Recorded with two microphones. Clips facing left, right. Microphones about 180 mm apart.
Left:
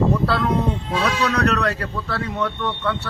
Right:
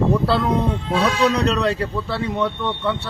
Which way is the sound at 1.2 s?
25° right (ahead or behind).